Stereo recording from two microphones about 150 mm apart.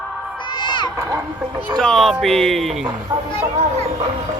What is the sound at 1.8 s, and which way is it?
Music, 5° left (ahead or behind).